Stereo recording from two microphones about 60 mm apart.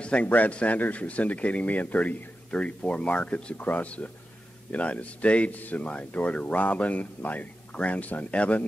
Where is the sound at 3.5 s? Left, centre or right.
Left.